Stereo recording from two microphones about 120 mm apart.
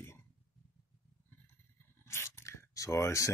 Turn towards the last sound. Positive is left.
turn(degrees=25)  # may be behind; listen again after turning